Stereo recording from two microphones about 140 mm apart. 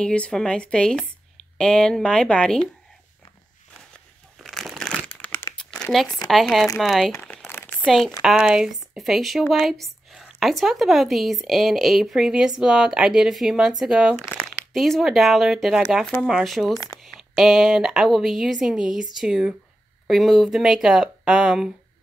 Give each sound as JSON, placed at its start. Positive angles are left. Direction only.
{"t": 0.0, "sound": "speech", "side_deg": 5}
{"t": 3.9, "sound": "a sound", "side_deg": 0}
{"t": 5.0, "sound": "crumpling", "side_deg": 10}
{"t": 6.2, "sound": "speech", "side_deg": 0}
{"t": 7.2, "sound": "crumpling", "side_deg": 15}
{"t": 8.2, "sound": "speech", "side_deg": -5}
{"t": 14.1, "sound": "crumpling", "side_deg": 20}
{"t": 14.7, "sound": "speech", "side_deg": 0}